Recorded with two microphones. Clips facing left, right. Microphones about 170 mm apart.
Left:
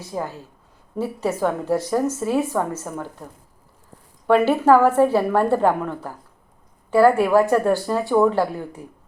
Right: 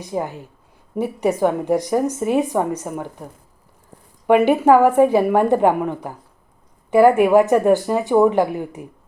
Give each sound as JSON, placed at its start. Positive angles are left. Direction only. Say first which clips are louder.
{"t": 0.0, "sound": "a woman's voice", "louder": "right 4 dB", "side_deg": -15}
{"t": 4.3, "sound": "a woman's voice", "louder": "right 2 dB", "side_deg": -15}